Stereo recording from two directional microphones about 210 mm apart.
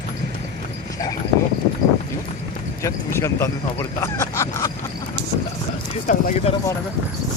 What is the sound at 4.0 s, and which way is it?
Speech, 15° left (ahead or behind).